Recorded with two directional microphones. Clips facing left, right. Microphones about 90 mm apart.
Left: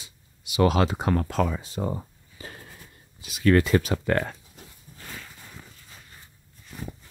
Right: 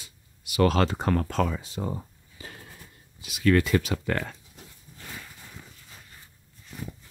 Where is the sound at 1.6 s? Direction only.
35° left (ahead or behind).